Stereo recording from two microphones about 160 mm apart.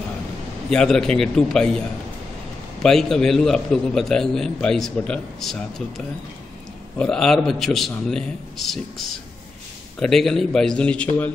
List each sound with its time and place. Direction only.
0.7 s a man's voice: 5° left (ahead or behind)
2.8 s a man's voice: 5° left (ahead or behind)